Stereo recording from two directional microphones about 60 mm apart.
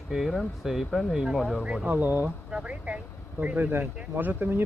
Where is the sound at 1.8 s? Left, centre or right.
Right.